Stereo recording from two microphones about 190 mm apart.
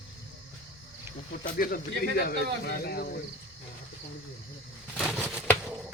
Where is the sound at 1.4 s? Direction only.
50° left (ahead or behind).